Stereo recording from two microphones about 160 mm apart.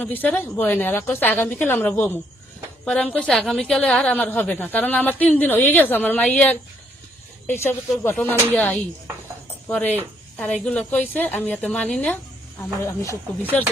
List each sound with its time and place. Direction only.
0.0 s a woman's voice: 10° left (ahead or behind)
12.8 s speech: 20° left (ahead or behind)
13.5 s a woman's voice: 5° left (ahead or behind)